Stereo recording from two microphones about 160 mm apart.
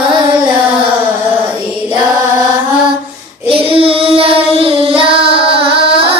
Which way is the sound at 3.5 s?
35° right (ahead or behind).